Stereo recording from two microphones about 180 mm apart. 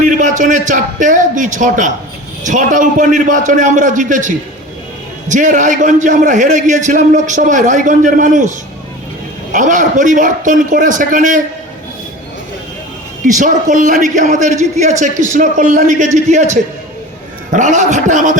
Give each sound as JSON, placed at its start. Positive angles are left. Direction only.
{"t": 0.0, "sound": "a man's voice", "side_deg": -45}
{"t": 13.3, "sound": "a man's voice", "side_deg": -45}